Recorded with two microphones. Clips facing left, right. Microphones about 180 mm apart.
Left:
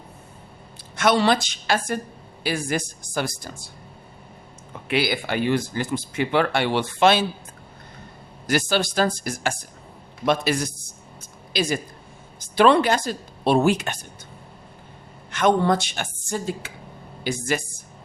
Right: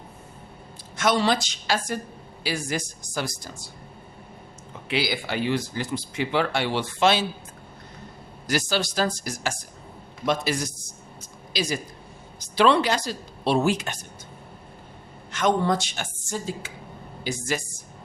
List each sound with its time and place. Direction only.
0.9 s speech: 65° left (ahead or behind)
4.9 s speech: 55° left (ahead or behind)
8.4 s a man's voice: 55° left (ahead or behind)
15.3 s speech: 60° left (ahead or behind)